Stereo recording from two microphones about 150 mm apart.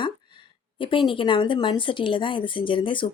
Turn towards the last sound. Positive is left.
turn(degrees=35)  # may be behind; listen again after turning